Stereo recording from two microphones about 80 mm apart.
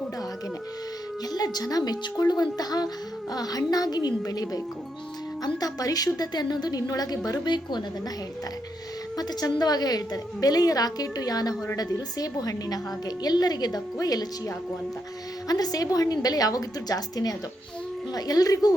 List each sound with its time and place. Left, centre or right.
1.3 s a woman's voice: left
7.3 s a woman's voice: left
9.1 s a woman's voice: left